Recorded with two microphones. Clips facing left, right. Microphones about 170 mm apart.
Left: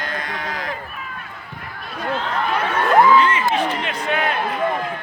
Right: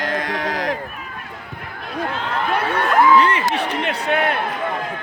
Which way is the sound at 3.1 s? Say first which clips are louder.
Even; 65° right (ahead or behind).